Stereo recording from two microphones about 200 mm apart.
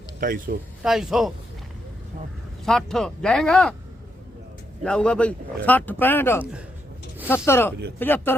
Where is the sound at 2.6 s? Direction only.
Centre (ahead or behind).